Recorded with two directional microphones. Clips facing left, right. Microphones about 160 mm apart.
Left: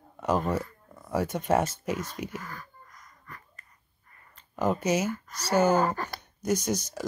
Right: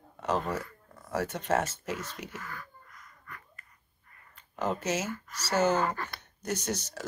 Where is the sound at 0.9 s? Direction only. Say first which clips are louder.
Left 4 dB; 10° left (ahead or behind).